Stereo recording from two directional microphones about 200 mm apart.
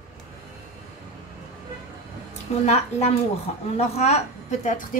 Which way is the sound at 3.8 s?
35° left (ahead or behind).